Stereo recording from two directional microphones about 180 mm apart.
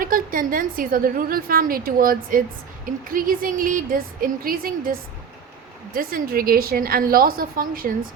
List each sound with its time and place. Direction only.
0.0 s a woman's voice: 50° right (ahead or behind)